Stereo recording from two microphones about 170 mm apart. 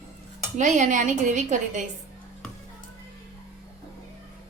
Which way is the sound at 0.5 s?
45° right (ahead or behind).